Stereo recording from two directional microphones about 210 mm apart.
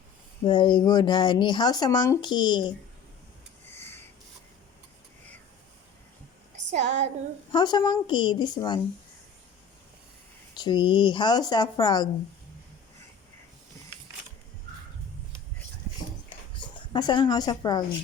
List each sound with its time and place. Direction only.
0.4 s speech: 20° left (ahead or behind)
6.8 s child singing: 55° right (ahead or behind)
7.5 s speech: 20° left (ahead or behind)
10.5 s speech: 20° left (ahead or behind)
16.6 s a woman's voice: 20° left (ahead or behind)